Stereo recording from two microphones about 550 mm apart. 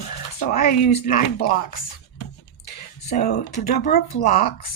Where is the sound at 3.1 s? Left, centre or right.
Centre.